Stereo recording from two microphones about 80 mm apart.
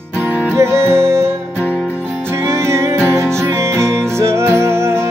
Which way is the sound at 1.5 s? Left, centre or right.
Centre.